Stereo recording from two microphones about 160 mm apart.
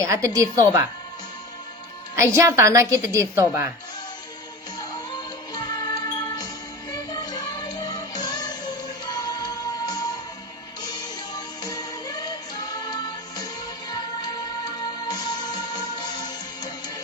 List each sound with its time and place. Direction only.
0.0 s a woman's voice: 20° right (ahead or behind)
2.1 s a woman's voice: 15° right (ahead or behind)
5.5 s music: 25° left (ahead or behind)
15.0 s music: 25° left (ahead or behind)